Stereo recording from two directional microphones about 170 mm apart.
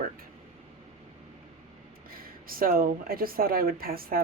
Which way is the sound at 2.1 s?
60° right (ahead or behind).